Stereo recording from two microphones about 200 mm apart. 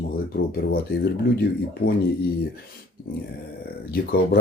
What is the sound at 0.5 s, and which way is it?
Speech, 50° left (ahead or behind).